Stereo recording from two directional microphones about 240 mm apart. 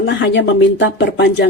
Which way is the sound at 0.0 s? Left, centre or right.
Left.